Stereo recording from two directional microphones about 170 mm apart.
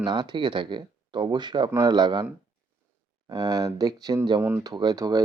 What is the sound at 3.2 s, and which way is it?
Speech, 25° right (ahead or behind).